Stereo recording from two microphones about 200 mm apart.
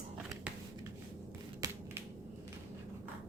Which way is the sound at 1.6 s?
15° right (ahead or behind).